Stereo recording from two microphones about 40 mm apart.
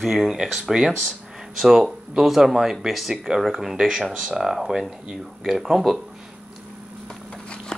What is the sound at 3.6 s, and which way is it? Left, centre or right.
Speech, centre.